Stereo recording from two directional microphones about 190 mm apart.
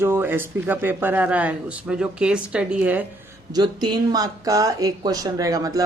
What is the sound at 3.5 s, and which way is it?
Speech, 25° right (ahead or behind).